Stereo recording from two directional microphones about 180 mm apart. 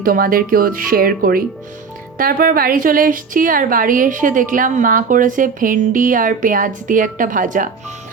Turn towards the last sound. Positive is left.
turn(degrees=-45)  # may be behind; listen again after turning